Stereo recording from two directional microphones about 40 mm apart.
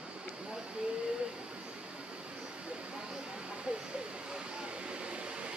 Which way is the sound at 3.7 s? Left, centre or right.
Right.